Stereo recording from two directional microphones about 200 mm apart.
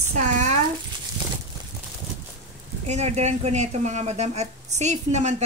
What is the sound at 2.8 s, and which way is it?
A woman's voice, 35° right (ahead or behind).